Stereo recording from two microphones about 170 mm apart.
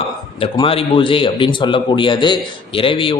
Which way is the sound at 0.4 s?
30° left (ahead or behind).